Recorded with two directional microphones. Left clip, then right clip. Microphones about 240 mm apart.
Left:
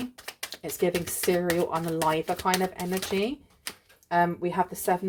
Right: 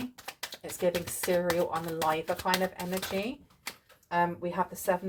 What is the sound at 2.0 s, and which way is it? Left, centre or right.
Speech, left.